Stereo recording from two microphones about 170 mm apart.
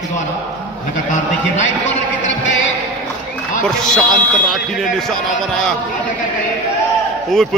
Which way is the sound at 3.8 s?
5° left (ahead or behind).